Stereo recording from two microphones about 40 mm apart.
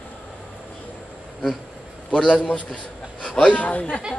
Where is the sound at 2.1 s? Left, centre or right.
Left.